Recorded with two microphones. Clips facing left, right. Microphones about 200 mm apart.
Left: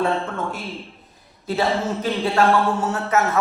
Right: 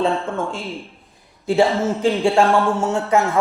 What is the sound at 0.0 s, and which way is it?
Speech, 25° right (ahead or behind).